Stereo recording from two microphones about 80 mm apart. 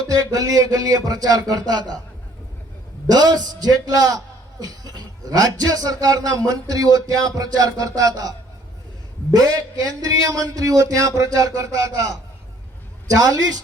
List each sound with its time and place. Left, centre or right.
0.1 s a man's voice: right
3.1 s a man's voice: right